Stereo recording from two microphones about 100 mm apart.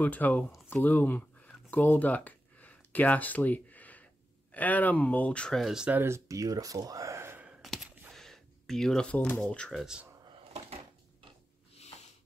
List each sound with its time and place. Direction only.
0.0 s speech: 15° left (ahead or behind)
0.7 s a sound: 15° left (ahead or behind)
5.6 s speech: 5° right (ahead or behind)
5.9 s speech: 20° right (ahead or behind)
7.6 s a sound: centre (ahead or behind)
8.1 s speech: 5° left (ahead or behind)
9.8 s speech: 5° right (ahead or behind)